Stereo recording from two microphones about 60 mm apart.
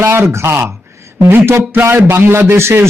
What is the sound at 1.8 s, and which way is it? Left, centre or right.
A man's voice, right.